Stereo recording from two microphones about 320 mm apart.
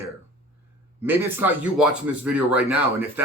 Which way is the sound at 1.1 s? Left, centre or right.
Centre.